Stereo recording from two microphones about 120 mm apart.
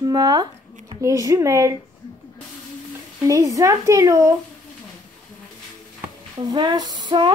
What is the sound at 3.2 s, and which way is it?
A woman's voice, 25° right (ahead or behind).